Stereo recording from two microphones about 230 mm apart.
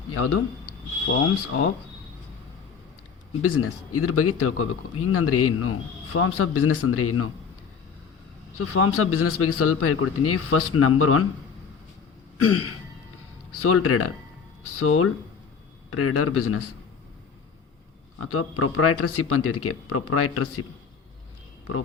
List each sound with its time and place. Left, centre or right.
0.1 s a man's voice: left
3.6 s a man's voice: left
8.5 s a man's voice: left
12.4 s a man's voice: left
18.2 s a man's voice: left